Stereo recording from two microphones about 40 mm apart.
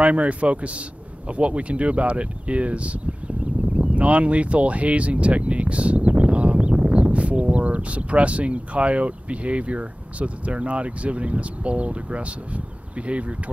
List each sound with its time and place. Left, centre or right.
0.0 s speech: right